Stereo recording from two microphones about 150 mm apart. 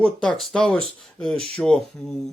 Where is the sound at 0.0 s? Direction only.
5° left (ahead or behind).